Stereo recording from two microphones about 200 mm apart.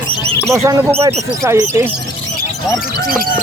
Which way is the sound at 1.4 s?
15° right (ahead or behind).